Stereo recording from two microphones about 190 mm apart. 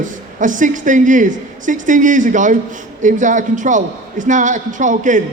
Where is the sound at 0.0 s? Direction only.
45° right (ahead or behind).